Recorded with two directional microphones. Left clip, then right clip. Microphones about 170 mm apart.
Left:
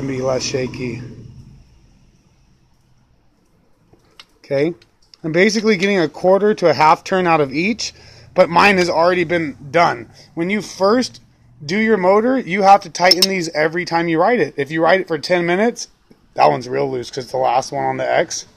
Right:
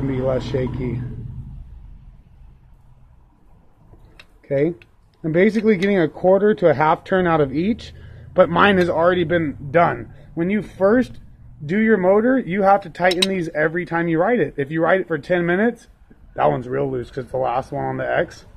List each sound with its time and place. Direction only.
0.2 s speech: 25° left (ahead or behind)
4.4 s speech: 25° left (ahead or behind)